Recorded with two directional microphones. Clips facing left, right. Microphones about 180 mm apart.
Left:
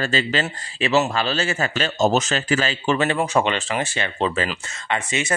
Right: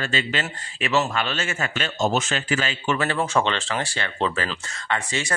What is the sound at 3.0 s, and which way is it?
Speech, 15° left (ahead or behind).